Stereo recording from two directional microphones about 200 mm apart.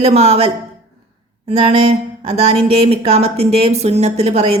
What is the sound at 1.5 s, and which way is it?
A woman's voice, 30° right (ahead or behind).